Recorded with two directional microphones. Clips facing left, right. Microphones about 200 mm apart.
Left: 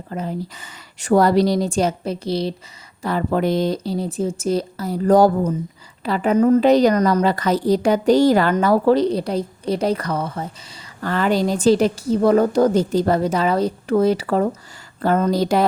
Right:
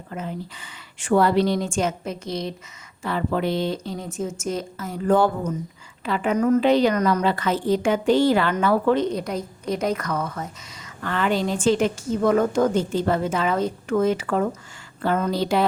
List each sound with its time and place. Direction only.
0.1 s a woman's voice: 35° left (ahead or behind)